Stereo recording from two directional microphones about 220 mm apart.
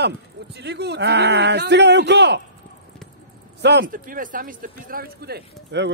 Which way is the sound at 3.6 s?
45° right (ahead or behind).